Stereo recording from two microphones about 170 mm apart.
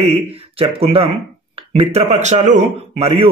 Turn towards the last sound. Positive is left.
turn(degrees=-35)  # may be behind; listen again after turning